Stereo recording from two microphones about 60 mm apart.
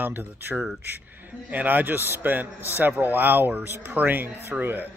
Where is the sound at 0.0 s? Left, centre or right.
Right.